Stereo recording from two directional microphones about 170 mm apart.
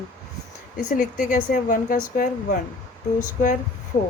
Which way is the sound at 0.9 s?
50° left (ahead or behind).